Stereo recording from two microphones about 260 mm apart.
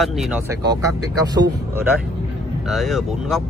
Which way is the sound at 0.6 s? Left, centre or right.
Centre.